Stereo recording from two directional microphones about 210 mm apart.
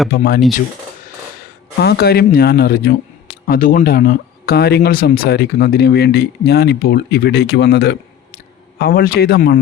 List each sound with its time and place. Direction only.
0.1 s speech: 45° left (ahead or behind)
1.8 s speech: 50° left (ahead or behind)